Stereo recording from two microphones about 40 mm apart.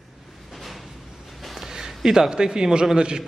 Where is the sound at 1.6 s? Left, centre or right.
Centre.